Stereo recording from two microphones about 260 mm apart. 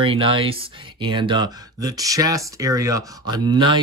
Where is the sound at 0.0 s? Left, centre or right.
Right.